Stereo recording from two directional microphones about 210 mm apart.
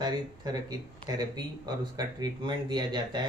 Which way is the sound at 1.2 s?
20° right (ahead or behind).